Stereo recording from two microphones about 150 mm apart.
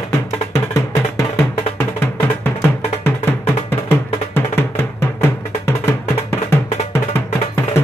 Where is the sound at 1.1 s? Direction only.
15° left (ahead or behind).